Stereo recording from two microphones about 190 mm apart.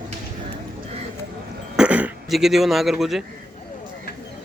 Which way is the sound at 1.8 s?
5° right (ahead or behind).